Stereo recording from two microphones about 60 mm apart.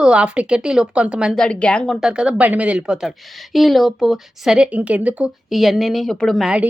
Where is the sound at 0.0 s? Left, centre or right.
Centre.